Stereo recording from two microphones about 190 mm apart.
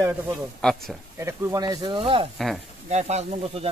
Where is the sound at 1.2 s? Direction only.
15° right (ahead or behind).